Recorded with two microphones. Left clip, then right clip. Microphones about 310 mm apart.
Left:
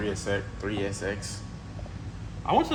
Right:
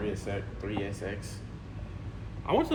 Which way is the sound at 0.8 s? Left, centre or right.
Left.